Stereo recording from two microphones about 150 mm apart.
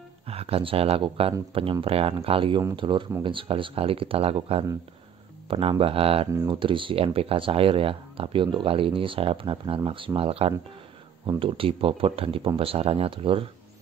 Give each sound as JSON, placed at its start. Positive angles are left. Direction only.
{"t": 0.3, "sound": "speech", "side_deg": -40}